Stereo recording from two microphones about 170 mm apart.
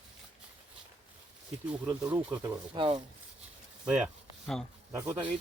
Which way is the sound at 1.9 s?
10° right (ahead or behind).